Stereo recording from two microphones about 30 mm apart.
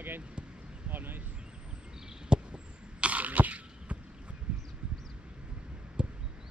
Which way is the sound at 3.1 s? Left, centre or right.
Right.